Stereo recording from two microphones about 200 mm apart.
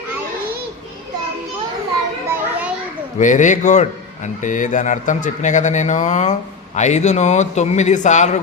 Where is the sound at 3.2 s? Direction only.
40° left (ahead or behind).